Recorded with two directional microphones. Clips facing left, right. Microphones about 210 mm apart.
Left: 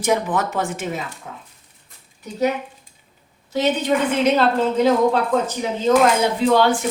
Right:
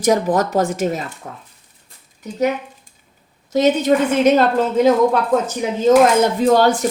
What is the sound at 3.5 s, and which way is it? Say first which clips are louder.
Speech: right 5 dB; 45° right (ahead or behind).